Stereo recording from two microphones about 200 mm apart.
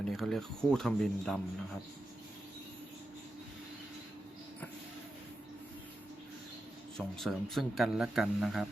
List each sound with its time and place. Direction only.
0.0 s a man's voice: centre (ahead or behind)
6.9 s a man's voice: centre (ahead or behind)